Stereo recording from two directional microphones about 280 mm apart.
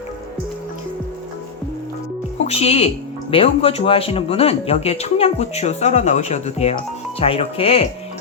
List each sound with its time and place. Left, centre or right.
2.4 s speech: left